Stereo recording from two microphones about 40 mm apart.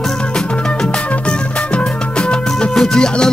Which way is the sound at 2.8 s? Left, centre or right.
Left.